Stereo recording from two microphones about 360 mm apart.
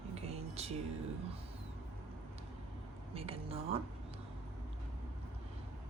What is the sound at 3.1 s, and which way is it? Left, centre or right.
Speech, centre.